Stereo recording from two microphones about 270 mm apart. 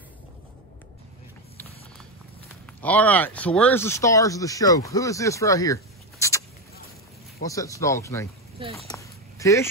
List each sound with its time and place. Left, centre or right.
2.8 s speech: centre
7.4 s speech: centre
8.6 s speech: centre
8.9 s a sound: centre